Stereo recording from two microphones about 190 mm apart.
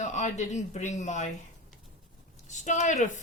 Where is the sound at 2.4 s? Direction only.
40° left (ahead or behind).